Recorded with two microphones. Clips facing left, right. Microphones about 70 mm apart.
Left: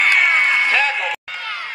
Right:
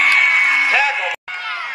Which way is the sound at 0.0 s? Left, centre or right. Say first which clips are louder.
Right 1 dB; centre.